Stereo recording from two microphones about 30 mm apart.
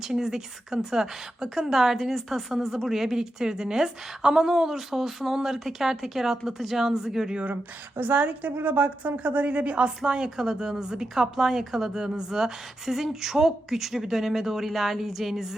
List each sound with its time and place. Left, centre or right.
0.0 s speech: centre
3.2 s speech: right
8.1 s a woman's voice: right
9.5 s a woman's voice: right
10.2 s speech: centre